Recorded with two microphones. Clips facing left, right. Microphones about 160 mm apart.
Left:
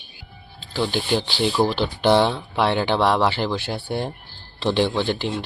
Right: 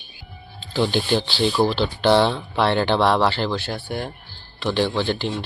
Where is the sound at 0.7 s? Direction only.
5° left (ahead or behind).